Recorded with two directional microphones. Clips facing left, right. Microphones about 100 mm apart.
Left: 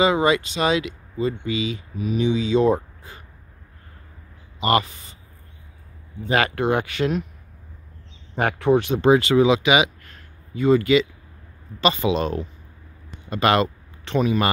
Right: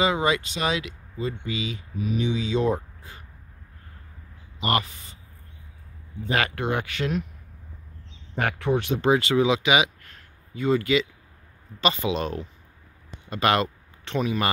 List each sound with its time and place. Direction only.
0.0 s speech: 90° left
6.2 s speech: 30° left (ahead or behind)
8.4 s speech: 25° left (ahead or behind)
9.0 s speech: 80° left
10.6 s speech: 70° left (ahead or behind)
11.8 s speech: 90° left; by 14.4 s 75° left (ahead or behind)